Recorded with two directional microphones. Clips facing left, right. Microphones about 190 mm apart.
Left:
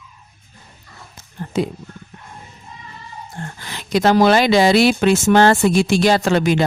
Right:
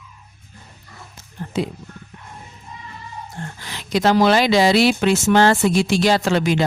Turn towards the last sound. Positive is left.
turn(degrees=50)  # may be behind; listen again after turning